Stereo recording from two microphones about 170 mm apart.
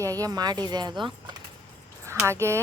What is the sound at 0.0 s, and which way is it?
Speech, 20° right (ahead or behind).